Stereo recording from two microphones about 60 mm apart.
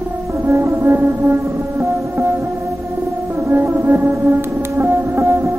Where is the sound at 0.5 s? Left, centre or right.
Right.